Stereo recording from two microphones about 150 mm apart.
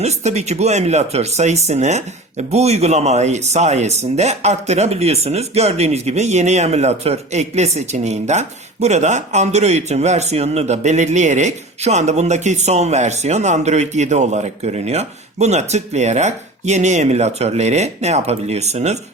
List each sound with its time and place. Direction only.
0.0 s speech: 50° right (ahead or behind)